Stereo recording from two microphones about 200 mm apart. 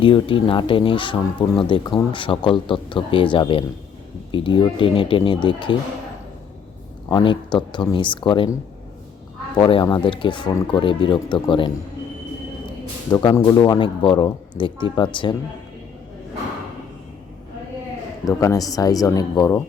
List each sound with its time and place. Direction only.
0.0 s speech: 25° left (ahead or behind)
7.1 s speech: 25° left (ahead or behind)
9.6 s speech: 25° left (ahead or behind)
13.1 s speech: 20° left (ahead or behind)
18.3 s speech: 15° left (ahead or behind)